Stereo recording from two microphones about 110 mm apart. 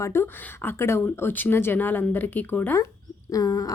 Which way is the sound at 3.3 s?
30° left (ahead or behind).